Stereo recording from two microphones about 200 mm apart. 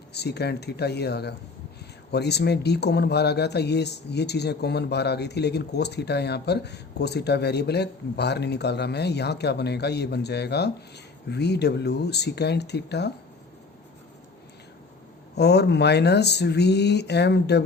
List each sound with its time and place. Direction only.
0.1 s speech: 55° left (ahead or behind)
15.4 s speech: 55° left (ahead or behind)